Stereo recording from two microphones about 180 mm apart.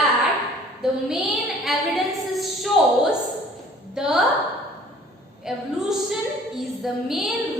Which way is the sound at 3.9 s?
5° right (ahead or behind).